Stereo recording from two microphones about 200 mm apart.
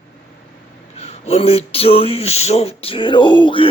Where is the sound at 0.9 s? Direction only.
30° left (ahead or behind).